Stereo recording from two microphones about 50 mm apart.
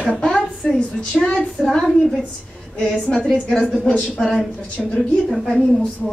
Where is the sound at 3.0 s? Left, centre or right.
Centre.